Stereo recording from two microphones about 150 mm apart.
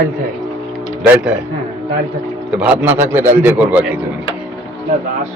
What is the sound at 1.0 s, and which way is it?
Speech, 10° right (ahead or behind).